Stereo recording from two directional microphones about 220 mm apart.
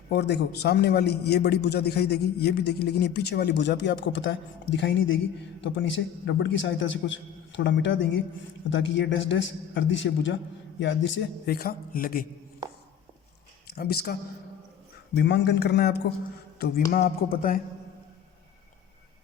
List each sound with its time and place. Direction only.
0.1 s a man's voice: 50° left (ahead or behind)
13.7 s a man's voice: 45° left (ahead or behind)
16.6 s a sound: 45° left (ahead or behind)
16.9 s speech: 40° left (ahead or behind)